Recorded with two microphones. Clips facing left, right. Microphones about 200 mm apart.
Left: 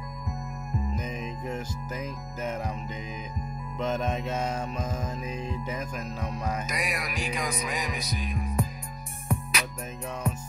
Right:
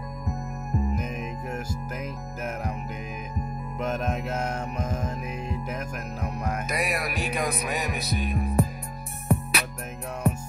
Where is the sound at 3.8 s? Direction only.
10° right (ahead or behind).